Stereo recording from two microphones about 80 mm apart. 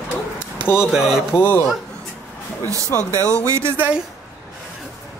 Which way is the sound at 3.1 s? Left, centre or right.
Right.